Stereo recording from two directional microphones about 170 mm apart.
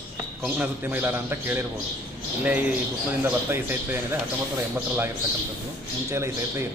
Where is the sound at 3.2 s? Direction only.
10° right (ahead or behind).